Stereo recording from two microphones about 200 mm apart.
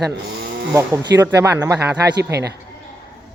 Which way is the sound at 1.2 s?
10° right (ahead or behind).